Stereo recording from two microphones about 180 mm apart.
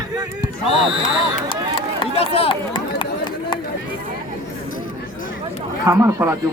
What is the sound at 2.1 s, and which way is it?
Chatter, 35° left (ahead or behind).